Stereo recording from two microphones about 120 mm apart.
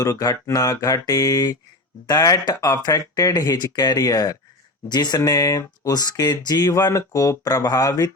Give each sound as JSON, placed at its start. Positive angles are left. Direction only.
{"t": 0.2, "sound": "speech", "side_deg": 30}